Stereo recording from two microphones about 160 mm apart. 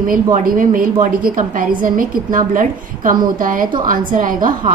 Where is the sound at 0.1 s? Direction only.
55° right (ahead or behind).